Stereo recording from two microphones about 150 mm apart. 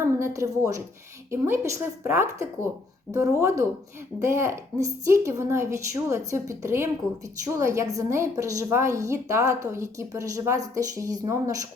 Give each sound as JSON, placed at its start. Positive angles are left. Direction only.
{"t": 0.0, "sound": "a woman's voice", "side_deg": -20}
{"t": 3.1, "sound": "speech", "side_deg": 30}
{"t": 3.4, "sound": "a woman's voice", "side_deg": -20}